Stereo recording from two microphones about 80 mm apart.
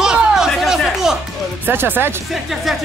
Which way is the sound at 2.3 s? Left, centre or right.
Centre.